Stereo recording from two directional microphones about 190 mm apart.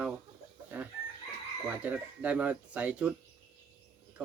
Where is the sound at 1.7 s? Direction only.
5° right (ahead or behind).